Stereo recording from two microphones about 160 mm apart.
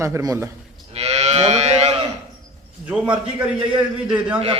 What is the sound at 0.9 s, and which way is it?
Moo, 45° right (ahead or behind).